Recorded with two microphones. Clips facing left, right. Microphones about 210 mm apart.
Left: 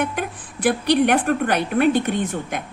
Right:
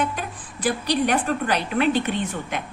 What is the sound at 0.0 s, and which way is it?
A woman's voice, 60° left (ahead or behind).